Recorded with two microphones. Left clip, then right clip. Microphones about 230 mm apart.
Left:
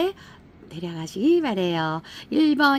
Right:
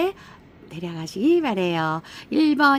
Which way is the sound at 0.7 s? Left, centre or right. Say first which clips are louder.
Right 1 dB; centre.